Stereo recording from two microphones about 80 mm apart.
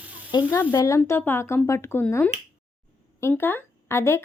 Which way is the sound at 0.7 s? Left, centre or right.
Left.